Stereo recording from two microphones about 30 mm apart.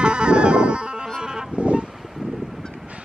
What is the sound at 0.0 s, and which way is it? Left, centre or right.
Music, right.